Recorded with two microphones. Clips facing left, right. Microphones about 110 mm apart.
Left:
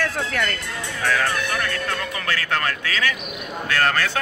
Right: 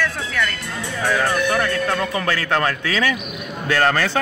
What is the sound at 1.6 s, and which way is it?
A man's voice, 30° right (ahead or behind).